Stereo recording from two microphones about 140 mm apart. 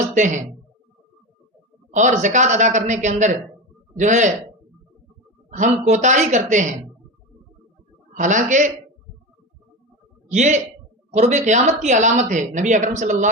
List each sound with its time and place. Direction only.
0.1 s speech: 60° right (ahead or behind)
1.9 s speech: 60° right (ahead or behind)
5.5 s speech: 60° right (ahead or behind)
8.1 s speech: 65° right (ahead or behind)
10.2 s speech: 55° right (ahead or behind)